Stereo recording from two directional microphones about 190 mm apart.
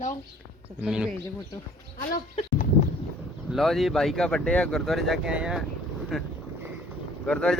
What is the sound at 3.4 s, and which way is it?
A man's voice, centre (ahead or behind).